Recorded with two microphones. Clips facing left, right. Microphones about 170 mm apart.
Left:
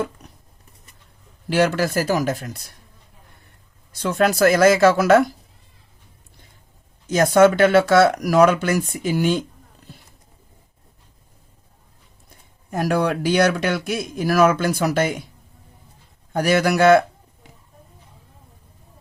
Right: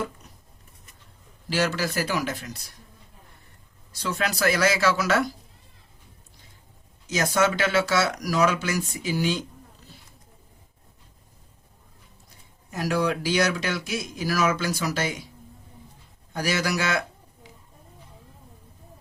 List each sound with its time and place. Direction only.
1.5 s speech: 55° left (ahead or behind)
3.9 s speech: 55° left (ahead or behind)
7.1 s speech: 55° left (ahead or behind)
9.9 s a sound: 55° left (ahead or behind)
12.7 s speech: 55° left (ahead or behind)
16.3 s speech: 55° left (ahead or behind)